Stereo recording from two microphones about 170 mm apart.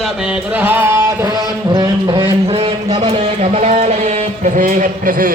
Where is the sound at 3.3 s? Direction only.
40° right (ahead or behind).